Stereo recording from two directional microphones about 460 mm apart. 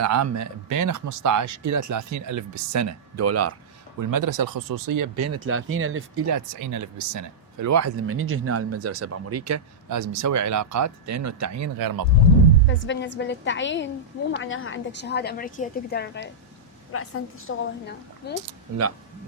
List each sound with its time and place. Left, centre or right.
0.0 s speech: right
4.0 s speech: right
6.3 s speech: right
12.6 s a woman's voice: left